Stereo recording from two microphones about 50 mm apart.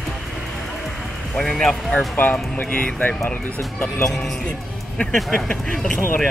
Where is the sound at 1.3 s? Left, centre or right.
Centre.